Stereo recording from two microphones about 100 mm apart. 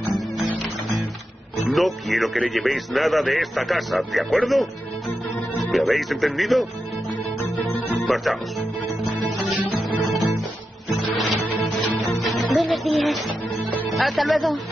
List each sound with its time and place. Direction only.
0.1 s music: centre (ahead or behind)
1.6 s speech: centre (ahead or behind)
5.7 s speech: centre (ahead or behind)
7.6 s music: centre (ahead or behind)
11.0 s music: centre (ahead or behind)
13.9 s speech: centre (ahead or behind)